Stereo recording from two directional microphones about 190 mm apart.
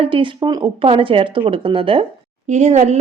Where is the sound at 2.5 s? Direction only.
40° right (ahead or behind).